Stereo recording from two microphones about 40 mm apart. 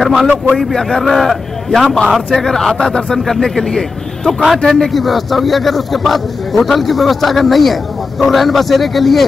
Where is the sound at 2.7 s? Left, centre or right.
Left.